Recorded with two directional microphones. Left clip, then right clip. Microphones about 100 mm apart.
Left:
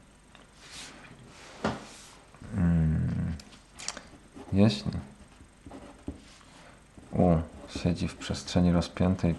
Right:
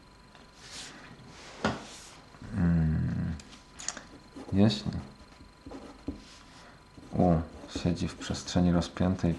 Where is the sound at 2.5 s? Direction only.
30° left (ahead or behind).